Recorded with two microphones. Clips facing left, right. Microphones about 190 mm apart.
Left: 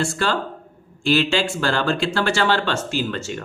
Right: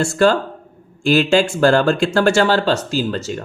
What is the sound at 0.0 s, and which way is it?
Speech, 45° right (ahead or behind).